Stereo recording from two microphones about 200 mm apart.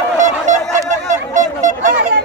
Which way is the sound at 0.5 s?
35° right (ahead or behind).